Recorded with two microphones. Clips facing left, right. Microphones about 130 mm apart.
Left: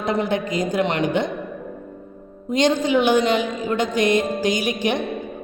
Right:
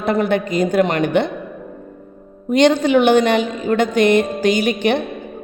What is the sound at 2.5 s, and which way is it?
A woman's voice, 65° right (ahead or behind).